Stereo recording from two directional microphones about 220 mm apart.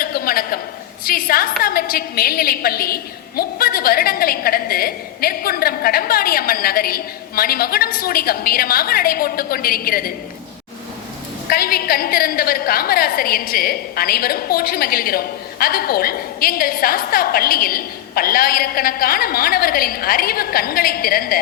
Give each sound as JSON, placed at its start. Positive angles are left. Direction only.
{"t": 0.0, "sound": "a sound", "side_deg": 40}
{"t": 1.0, "sound": "a woman's voice", "side_deg": 40}
{"t": 11.4, "sound": "a woman's voice", "side_deg": 45}